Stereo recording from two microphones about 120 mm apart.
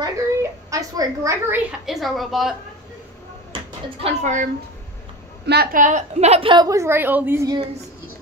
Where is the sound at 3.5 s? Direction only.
50° right (ahead or behind).